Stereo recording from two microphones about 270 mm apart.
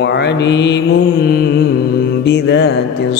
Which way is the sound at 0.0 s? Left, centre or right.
Left.